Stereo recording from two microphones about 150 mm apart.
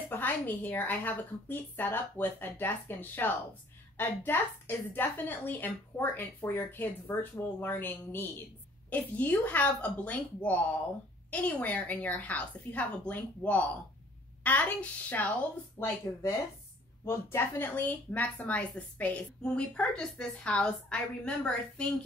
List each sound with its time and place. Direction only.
0.1 s speech: 10° left (ahead or behind)